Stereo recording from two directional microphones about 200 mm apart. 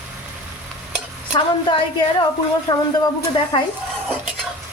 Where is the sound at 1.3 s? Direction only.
25° left (ahead or behind).